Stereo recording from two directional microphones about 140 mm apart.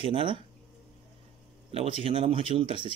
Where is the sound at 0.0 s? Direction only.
40° right (ahead or behind).